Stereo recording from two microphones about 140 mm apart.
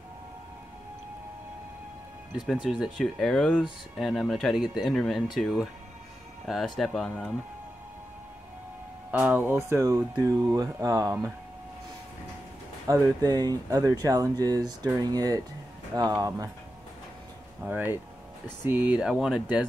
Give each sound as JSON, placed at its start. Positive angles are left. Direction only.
{"t": 2.3, "sound": "speech", "side_deg": 0}
{"t": 9.2, "sound": "speech", "side_deg": -15}
{"t": 12.8, "sound": "speech", "side_deg": -25}
{"t": 17.6, "sound": "speech", "side_deg": -15}